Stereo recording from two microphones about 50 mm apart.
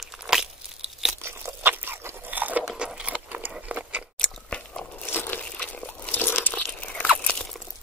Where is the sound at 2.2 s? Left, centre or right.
Right.